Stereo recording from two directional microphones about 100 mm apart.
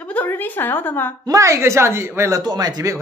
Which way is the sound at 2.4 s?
45° right (ahead or behind).